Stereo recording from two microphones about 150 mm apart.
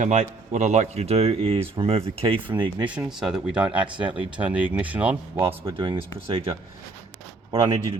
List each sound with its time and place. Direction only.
0.0 s speech: 50° right (ahead or behind); by 2.9 s 30° right (ahead or behind)
2.9 s speech: 5° right (ahead or behind)
5.7 s speech: 35° right (ahead or behind)
7.5 s speech: 30° right (ahead or behind)